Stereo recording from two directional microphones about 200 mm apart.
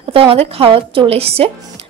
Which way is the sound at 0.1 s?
30° right (ahead or behind).